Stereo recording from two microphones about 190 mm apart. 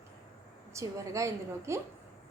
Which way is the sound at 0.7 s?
15° right (ahead or behind).